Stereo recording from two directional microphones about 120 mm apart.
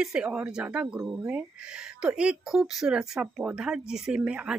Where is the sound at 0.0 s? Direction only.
5° right (ahead or behind).